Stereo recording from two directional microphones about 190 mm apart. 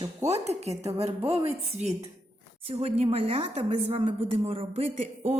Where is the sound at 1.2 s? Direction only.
10° right (ahead or behind).